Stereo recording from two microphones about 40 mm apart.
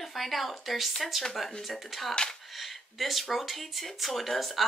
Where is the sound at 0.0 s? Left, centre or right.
Centre.